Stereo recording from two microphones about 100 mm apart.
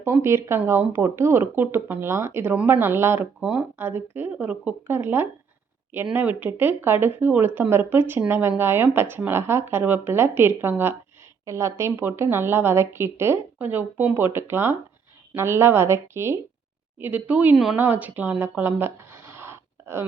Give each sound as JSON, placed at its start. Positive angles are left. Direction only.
{"t": 0.0, "sound": "speech", "side_deg": -25}
{"t": 3.4, "sound": "speech", "side_deg": -10}
{"t": 3.8, "sound": "speech", "side_deg": -20}
{"t": 17.0, "sound": "speech", "side_deg": -15}